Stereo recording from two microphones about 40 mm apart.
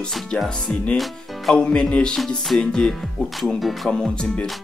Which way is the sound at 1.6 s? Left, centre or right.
Left.